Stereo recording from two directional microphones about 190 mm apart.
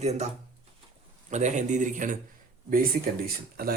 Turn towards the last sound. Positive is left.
turn(degrees=-55)  # may be behind; listen again after turning